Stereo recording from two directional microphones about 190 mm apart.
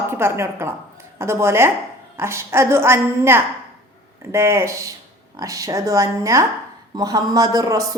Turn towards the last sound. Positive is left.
turn(degrees=-20)  # may be behind; listen again after turning